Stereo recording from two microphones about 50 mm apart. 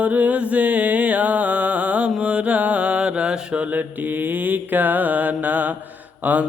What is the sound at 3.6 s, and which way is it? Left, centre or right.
Mantra, right.